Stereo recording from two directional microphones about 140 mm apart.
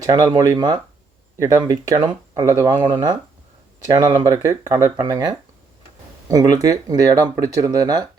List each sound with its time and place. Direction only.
0.0 s speech: 30° right (ahead or behind)
3.9 s speech: 30° right (ahead or behind)